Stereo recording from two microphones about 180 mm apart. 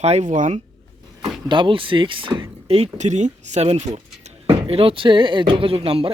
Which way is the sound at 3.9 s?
40° right (ahead or behind).